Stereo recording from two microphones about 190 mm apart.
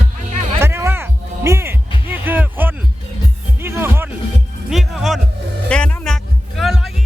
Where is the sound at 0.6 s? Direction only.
15° right (ahead or behind).